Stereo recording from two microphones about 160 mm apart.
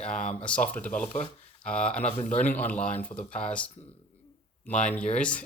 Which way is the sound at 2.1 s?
50° left (ahead or behind).